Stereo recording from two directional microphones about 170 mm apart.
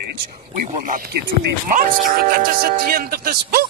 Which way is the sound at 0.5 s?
50° right (ahead or behind).